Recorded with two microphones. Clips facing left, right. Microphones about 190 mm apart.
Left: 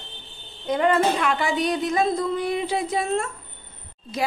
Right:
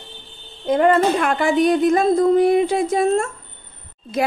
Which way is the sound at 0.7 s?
50° right (ahead or behind).